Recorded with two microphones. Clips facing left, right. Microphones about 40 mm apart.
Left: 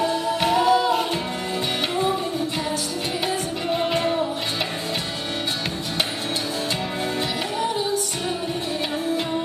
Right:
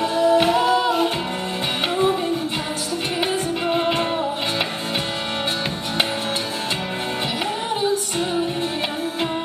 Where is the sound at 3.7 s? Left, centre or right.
Right.